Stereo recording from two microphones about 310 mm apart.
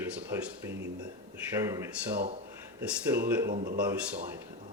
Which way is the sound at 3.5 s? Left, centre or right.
Right.